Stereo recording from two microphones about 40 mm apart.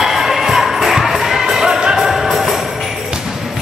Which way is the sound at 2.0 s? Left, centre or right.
Centre.